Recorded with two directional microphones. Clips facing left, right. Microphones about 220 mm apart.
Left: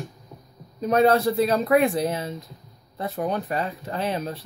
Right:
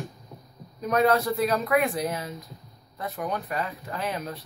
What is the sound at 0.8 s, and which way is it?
Speech, 30° left (ahead or behind).